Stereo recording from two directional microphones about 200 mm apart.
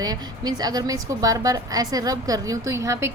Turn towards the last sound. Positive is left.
turn(degrees=-15)  # may be behind; listen again after turning